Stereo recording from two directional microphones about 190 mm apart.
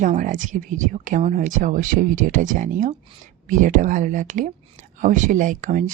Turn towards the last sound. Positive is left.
turn(degrees=-40)  # may be behind; listen again after turning